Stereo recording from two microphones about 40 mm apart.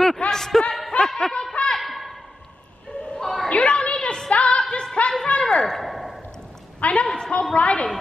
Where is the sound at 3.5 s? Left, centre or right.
Left.